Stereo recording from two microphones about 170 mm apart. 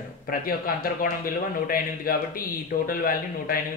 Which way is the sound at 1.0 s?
60° left (ahead or behind).